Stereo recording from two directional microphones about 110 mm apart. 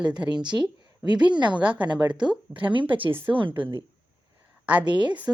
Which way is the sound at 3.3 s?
50° right (ahead or behind).